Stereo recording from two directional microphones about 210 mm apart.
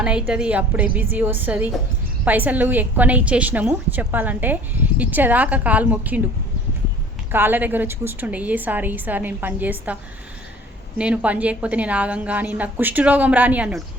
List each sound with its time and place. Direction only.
0.0 s a woman's voice: 5° right (ahead or behind)
7.3 s a woman's voice: 10° right (ahead or behind)